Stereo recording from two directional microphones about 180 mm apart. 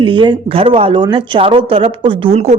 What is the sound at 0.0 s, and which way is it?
Speech, 25° right (ahead or behind).